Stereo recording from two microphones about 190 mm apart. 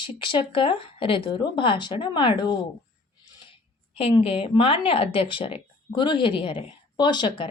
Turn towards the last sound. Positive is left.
turn(degrees=25)  # may be behind; listen again after turning